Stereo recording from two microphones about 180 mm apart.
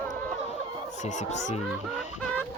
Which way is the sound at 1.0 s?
40° left (ahead or behind).